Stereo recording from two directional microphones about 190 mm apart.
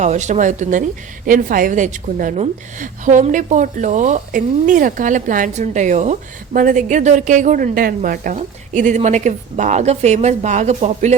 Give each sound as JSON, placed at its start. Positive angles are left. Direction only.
{"t": 0.0, "sound": "a woman's voice", "side_deg": -35}